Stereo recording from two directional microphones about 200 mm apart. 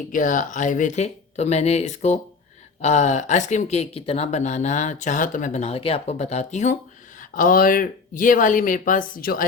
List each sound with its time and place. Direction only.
0.1 s speech: 40° left (ahead or behind)